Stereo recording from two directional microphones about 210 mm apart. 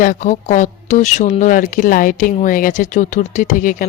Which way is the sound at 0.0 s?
40° left (ahead or behind).